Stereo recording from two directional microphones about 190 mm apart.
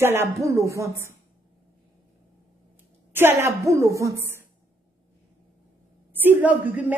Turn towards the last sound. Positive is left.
turn(degrees=-10)  # may be behind; listen again after turning